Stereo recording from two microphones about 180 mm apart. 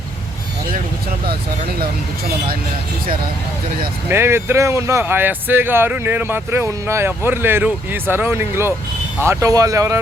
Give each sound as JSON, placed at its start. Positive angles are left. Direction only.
{"t": 4.1, "sound": "speech", "side_deg": -15}